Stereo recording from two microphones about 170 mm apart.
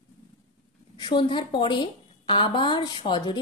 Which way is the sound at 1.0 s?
30° left (ahead or behind).